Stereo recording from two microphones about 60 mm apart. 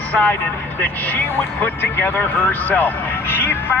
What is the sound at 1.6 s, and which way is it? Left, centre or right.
Speech, left.